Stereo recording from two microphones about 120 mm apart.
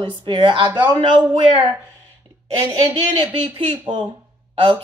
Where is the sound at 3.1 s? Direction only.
50° right (ahead or behind).